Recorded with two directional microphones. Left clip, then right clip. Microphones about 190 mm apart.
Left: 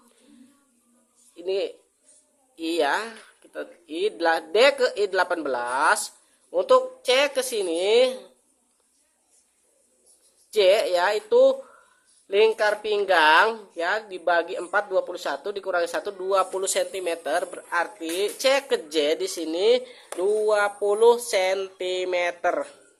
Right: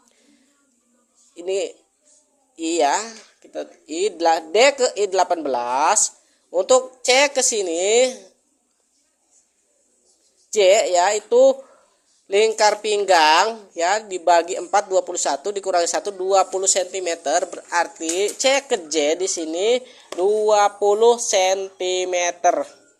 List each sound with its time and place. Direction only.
1.4 s a man's voice: 10° right (ahead or behind)
10.5 s a man's voice: 10° right (ahead or behind)
12.5 s a man's voice: 20° right (ahead or behind)